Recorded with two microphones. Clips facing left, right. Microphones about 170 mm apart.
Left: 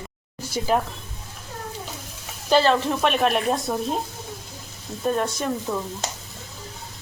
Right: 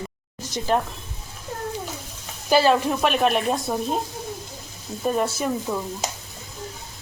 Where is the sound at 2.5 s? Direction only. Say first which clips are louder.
Right 1 dB; 10° right (ahead or behind).